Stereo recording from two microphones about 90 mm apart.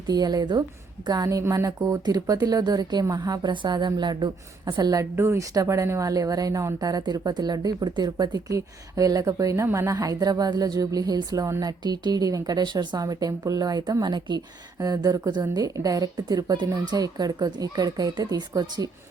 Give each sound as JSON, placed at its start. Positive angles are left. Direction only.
{"t": 0.1, "sound": "a woman's voice", "side_deg": -50}
{"t": 3.5, "sound": "a woman's voice", "side_deg": -60}
{"t": 5.1, "sound": "a woman's voice", "side_deg": -30}